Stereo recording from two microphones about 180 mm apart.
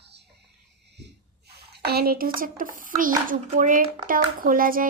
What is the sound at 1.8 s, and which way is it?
A woman's voice, 60° right (ahead or behind).